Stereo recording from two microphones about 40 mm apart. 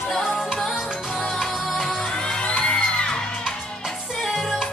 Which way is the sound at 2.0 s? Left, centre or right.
Left.